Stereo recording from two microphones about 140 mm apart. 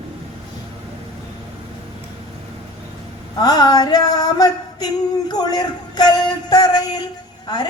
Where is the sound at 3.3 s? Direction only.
30° left (ahead or behind).